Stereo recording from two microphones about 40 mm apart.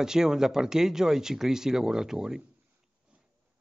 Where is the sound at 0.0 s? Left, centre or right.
Centre.